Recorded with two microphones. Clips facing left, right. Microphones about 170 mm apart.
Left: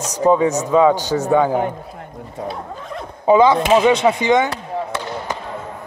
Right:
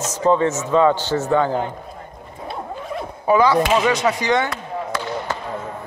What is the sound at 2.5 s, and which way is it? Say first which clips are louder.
Zipper: even; 5° right (ahead or behind).